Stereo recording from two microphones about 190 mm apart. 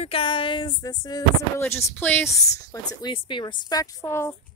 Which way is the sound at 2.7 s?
25° left (ahead or behind).